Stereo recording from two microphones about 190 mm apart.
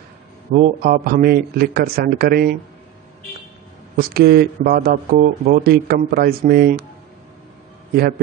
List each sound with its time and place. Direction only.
0.5 s speech: 45° right (ahead or behind)
3.9 s speech: 50° right (ahead or behind)